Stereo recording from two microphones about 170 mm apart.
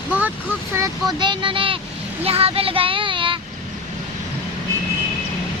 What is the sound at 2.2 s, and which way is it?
Child singing, 35° right (ahead or behind).